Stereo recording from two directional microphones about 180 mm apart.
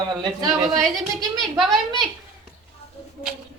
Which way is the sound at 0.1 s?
25° right (ahead or behind).